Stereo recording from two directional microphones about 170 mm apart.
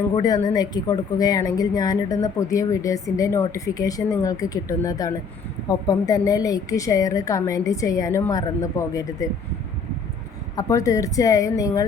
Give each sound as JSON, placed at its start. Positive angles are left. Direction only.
{"t": 0.2, "sound": "speech", "side_deg": 25}
{"t": 10.5, "sound": "speech", "side_deg": 20}